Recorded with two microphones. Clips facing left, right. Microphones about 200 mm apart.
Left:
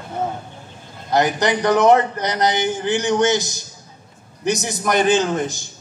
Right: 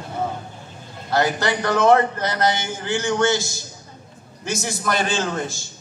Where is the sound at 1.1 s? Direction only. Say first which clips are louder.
Left 3 dB; 20° left (ahead or behind).